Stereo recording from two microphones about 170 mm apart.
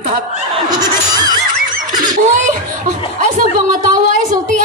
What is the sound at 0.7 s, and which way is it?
Neigh, 25° right (ahead or behind).